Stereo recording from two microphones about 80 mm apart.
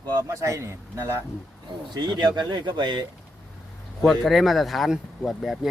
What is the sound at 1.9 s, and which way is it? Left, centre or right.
Speech, right.